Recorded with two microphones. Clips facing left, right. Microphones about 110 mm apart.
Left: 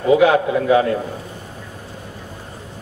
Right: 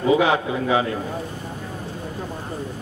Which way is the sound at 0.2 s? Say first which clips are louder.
Left 5 dB; 55° left (ahead or behind).